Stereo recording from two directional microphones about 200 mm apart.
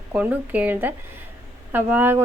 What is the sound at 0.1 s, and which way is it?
Speech, 10° right (ahead or behind).